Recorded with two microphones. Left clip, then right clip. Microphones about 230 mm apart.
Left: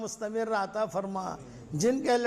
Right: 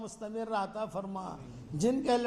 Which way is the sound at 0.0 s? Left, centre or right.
Left.